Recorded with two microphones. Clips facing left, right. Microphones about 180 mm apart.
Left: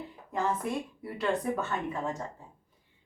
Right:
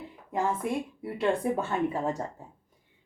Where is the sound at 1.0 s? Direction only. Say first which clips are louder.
Right 3 dB; 25° right (ahead or behind).